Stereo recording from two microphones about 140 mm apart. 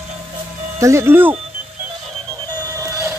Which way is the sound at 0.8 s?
20° right (ahead or behind).